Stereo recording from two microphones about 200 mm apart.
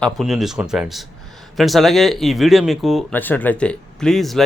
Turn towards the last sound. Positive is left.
turn(degrees=0)  # may be behind; listen again after turning